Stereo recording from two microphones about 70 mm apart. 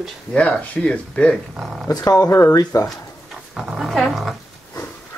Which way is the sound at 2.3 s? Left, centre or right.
Left.